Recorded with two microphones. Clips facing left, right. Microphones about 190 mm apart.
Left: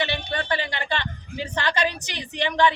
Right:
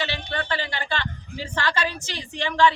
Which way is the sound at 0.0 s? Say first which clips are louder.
Left 2 dB; 20° left (ahead or behind).